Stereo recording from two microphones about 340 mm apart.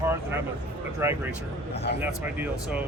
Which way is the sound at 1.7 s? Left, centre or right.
Left.